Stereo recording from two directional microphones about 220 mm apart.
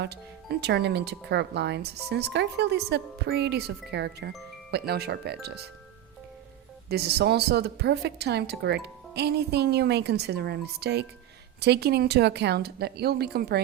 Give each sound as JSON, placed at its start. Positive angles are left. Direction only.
{"t": 0.0, "sound": "speech", "side_deg": -50}
{"t": 6.8, "sound": "speech", "side_deg": -45}